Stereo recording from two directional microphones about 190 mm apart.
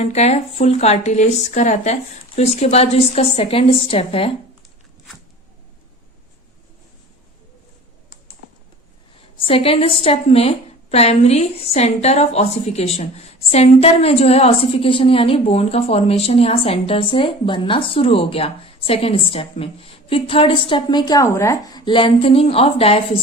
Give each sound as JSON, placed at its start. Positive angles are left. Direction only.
{"t": 0.0, "sound": "speech", "side_deg": 35}
{"t": 9.4, "sound": "a woman's voice", "side_deg": 30}